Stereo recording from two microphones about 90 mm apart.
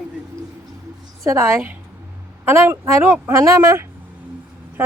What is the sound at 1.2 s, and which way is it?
A woman's voice, 30° right (ahead or behind).